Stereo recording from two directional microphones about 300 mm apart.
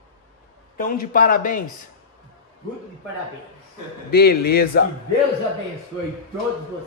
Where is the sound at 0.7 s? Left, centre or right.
Left.